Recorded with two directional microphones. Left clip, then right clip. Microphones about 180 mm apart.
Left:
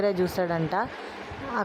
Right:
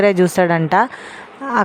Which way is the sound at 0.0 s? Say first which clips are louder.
Right 12 dB; 40° right (ahead or behind).